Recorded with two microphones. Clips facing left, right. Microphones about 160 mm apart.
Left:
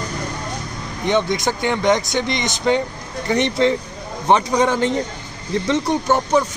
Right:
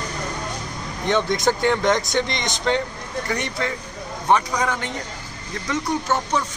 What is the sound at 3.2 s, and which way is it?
A man's voice, 25° left (ahead or behind).